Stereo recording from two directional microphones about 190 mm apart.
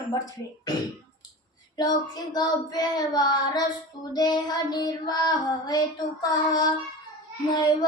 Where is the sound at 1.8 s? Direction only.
20° left (ahead or behind).